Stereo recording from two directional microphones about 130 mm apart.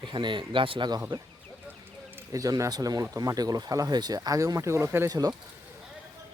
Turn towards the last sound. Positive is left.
turn(degrees=-30)  # may be behind; listen again after turning